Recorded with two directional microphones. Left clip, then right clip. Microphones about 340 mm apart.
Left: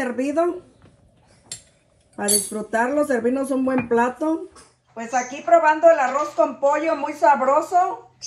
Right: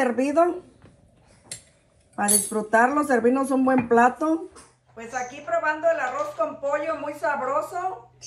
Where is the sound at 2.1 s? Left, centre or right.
Centre.